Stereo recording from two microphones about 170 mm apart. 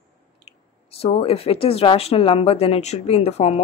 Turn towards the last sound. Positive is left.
turn(degrees=35)  # may be behind; listen again after turning